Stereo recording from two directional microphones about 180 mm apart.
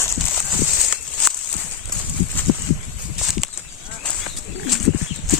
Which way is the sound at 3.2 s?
Centre (ahead or behind).